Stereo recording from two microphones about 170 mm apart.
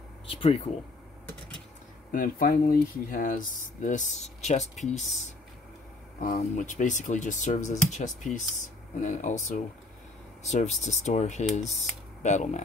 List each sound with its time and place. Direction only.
0.3 s speech: 35° left (ahead or behind)
2.1 s speech: 55° left (ahead or behind)